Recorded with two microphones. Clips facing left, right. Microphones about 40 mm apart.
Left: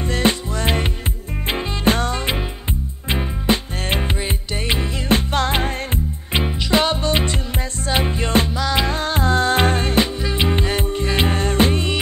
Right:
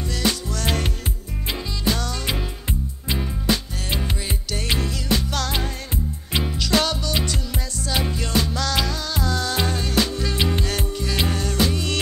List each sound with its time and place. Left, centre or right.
0.0 s music: left
1.5 s music: left
8.5 s music: left
8.8 s music: left
10.1 s music: left